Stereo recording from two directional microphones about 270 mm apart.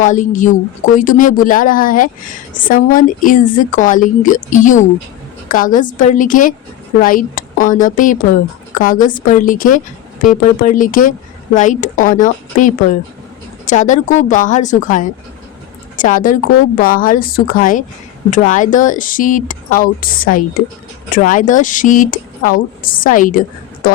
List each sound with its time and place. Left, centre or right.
0.0 s a woman's voice: left